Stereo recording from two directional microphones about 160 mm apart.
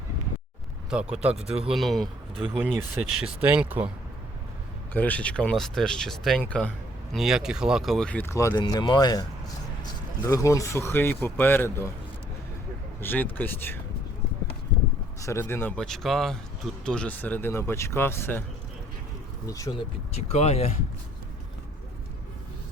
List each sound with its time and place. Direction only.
0.9 s speech: 5° right (ahead or behind)
4.9 s speech: 10° left (ahead or behind)
8.5 s speech: 25° left (ahead or behind)
10.2 s speech: 20° left (ahead or behind)
13.0 s speech: 10° left (ahead or behind)
15.2 s speech: 15° left (ahead or behind)
19.5 s speech: 20° left (ahead or behind)
20.1 s speech: 40° left (ahead or behind)